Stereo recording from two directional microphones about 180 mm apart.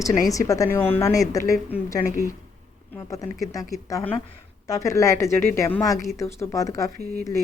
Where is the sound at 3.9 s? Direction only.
15° left (ahead or behind).